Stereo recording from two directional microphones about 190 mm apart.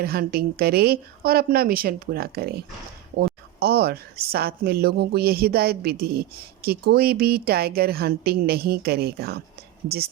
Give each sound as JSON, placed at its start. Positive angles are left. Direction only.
{"t": 0.0, "sound": "a woman's voice", "side_deg": -55}